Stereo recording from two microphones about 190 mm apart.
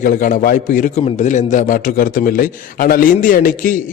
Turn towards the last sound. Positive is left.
turn(degrees=45)  # may be behind; listen again after turning